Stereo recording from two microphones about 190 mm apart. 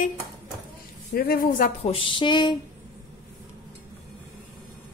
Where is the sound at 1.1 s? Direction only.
55° left (ahead or behind).